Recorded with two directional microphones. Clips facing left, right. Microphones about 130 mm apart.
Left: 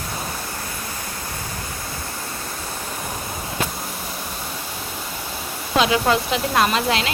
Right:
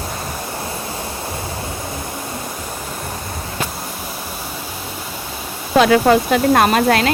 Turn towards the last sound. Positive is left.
turn(degrees=-50)  # may be behind; listen again after turning